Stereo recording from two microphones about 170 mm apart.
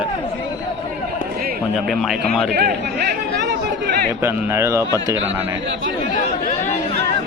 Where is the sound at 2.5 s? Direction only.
70° right (ahead or behind).